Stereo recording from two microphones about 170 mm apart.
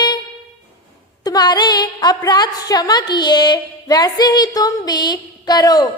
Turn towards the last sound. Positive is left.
turn(degrees=20)  # may be behind; listen again after turning